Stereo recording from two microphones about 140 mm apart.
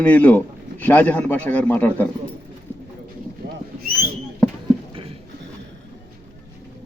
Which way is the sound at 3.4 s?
90° right.